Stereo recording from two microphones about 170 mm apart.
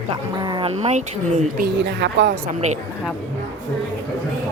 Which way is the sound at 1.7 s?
90° right.